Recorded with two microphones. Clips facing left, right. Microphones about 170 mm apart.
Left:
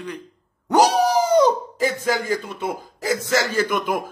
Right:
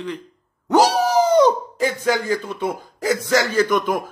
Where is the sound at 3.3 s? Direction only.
45° right (ahead or behind).